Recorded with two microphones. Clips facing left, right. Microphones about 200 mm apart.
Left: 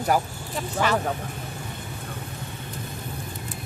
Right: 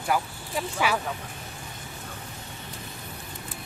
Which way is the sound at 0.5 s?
10° right (ahead or behind).